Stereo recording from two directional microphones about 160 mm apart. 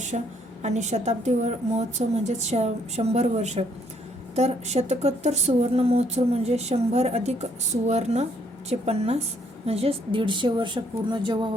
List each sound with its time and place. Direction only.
0.1 s a woman's voice: 45° right (ahead or behind); by 11.3 s 30° right (ahead or behind)